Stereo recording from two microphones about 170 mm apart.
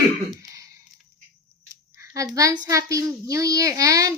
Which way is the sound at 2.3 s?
20° right (ahead or behind).